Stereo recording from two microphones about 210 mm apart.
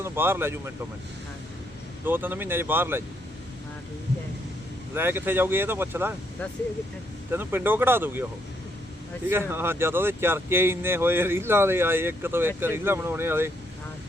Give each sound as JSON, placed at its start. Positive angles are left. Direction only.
{"t": 0.0, "sound": "speech", "side_deg": -10}
{"t": 2.0, "sound": "speech", "side_deg": -10}
{"t": 4.9, "sound": "speech", "side_deg": -10}
{"t": 7.3, "sound": "speech", "side_deg": -10}
{"t": 9.3, "sound": "speech", "side_deg": -10}